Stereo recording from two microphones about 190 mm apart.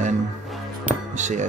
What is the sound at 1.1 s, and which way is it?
Speech, 40° right (ahead or behind).